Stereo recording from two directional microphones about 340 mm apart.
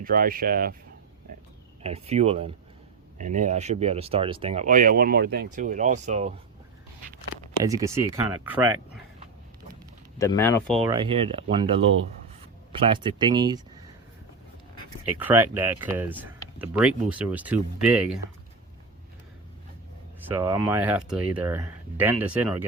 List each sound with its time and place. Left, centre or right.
0.0 s speech: right
1.8 s speech: centre
7.6 s speech: centre
10.2 s speech: centre
10.8 s speech: centre
11.4 s speech: right
12.7 s speech: centre
15.2 s speech: centre
20.2 s speech: centre